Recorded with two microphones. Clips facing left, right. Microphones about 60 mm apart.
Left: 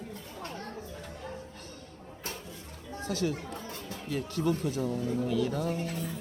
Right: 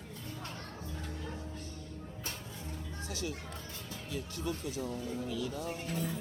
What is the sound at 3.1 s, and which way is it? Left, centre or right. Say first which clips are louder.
Speech: left 9 dB; left.